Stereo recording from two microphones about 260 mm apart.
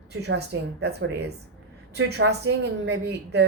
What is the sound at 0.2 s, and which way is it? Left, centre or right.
Speech, right.